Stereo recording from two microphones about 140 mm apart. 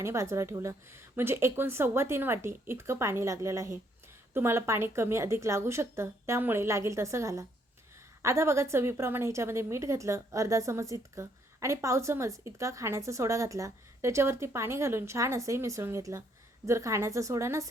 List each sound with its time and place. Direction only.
0.0 s a woman's voice: 20° right (ahead or behind)